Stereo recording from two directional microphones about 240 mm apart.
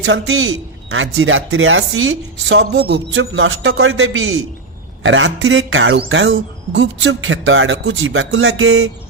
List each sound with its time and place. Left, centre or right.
0.0 s a man's voice: right